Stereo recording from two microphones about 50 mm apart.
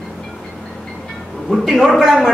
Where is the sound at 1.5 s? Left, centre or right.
Centre.